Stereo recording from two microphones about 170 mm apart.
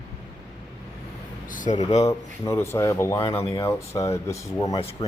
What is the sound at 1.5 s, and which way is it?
Speech, 50° left (ahead or behind).